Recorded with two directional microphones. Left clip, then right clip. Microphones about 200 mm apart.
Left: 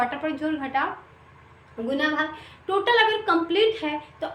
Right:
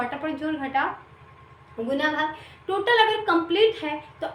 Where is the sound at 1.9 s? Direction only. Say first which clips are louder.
Even; 10° left (ahead or behind).